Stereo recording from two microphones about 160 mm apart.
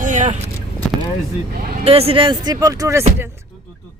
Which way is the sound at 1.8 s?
40° right (ahead or behind).